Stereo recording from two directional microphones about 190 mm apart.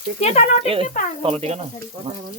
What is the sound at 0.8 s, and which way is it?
Speech, 45° left (ahead or behind).